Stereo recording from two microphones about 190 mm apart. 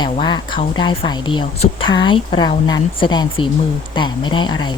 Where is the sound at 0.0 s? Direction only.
25° left (ahead or behind).